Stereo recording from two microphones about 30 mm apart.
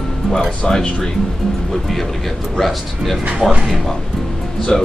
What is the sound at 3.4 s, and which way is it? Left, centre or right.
Speech, right.